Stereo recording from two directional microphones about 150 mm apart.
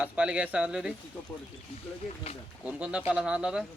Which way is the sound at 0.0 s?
10° right (ahead or behind).